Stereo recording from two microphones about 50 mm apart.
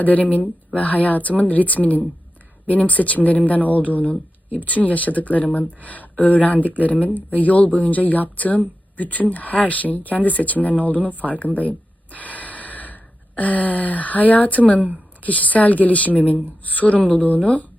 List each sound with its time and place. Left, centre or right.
0.0 s speech: left
12.1 s gasp: left
15.2 s speech: left